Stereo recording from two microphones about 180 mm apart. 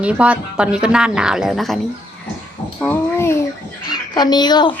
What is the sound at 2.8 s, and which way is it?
A child's voice, 10° left (ahead or behind).